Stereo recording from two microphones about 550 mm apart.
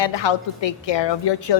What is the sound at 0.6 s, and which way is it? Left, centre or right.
Speech, left.